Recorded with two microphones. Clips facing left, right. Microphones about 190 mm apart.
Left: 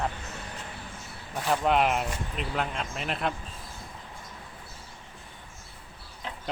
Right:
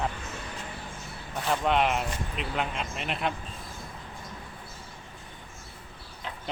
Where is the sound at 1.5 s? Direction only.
5° left (ahead or behind).